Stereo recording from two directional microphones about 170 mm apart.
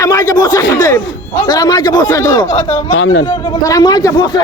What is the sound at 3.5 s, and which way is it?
Speech, 20° left (ahead or behind).